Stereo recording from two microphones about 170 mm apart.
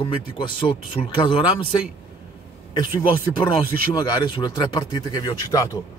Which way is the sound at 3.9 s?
25° left (ahead or behind).